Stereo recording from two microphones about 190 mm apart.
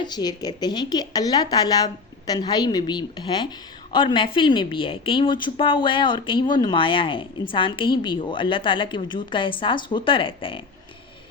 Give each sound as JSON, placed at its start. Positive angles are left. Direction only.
{"t": 0.0, "sound": "a woman's voice", "side_deg": 20}